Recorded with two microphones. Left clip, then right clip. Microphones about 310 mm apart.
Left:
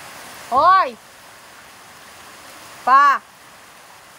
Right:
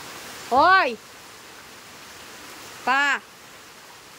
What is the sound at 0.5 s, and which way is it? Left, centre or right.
Speech, centre.